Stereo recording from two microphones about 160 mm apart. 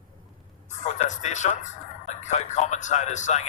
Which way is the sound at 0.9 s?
45° left (ahead or behind).